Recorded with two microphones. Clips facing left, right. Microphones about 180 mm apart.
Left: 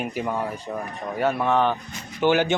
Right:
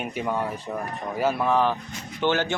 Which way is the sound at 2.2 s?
15° left (ahead or behind).